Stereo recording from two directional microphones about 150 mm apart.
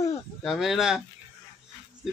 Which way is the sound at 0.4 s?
Centre (ahead or behind).